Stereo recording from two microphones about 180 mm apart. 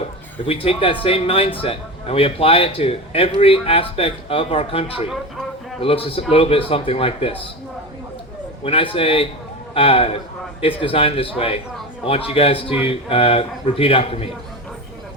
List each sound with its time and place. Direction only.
0.4 s a man's voice: 30° left (ahead or behind)
8.6 s a man's voice: 30° left (ahead or behind)